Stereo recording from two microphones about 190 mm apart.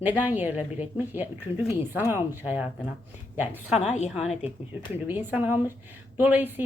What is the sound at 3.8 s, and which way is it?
Speech, 35° left (ahead or behind).